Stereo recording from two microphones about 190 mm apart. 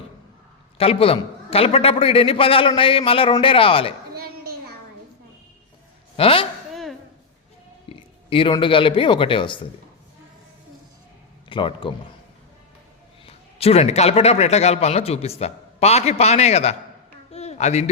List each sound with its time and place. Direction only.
0.8 s a man's voice: 30° left (ahead or behind)
4.1 s a sound: 55° right (ahead or behind)
6.1 s a man's voice: 30° left (ahead or behind)
7.9 s speech: 30° left (ahead or behind)
11.4 s speech: 25° left (ahead or behind)
13.2 s a man's voice: 30° left (ahead or behind)
17.3 s a sound: 35° left (ahead or behind)